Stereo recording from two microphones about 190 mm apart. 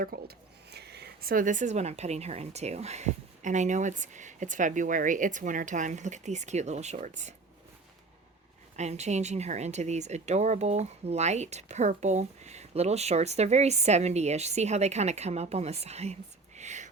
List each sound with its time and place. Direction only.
0.0 s speech: 55° right (ahead or behind); by 7.3 s 40° right (ahead or behind)
8.7 s speech: 35° right (ahead or behind)
16.6 s whispering: 40° right (ahead or behind)